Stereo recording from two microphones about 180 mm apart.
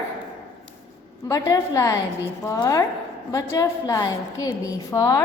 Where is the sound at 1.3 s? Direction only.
20° left (ahead or behind).